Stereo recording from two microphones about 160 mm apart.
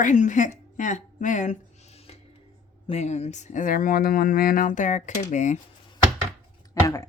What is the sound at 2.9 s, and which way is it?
Speech, 45° left (ahead or behind).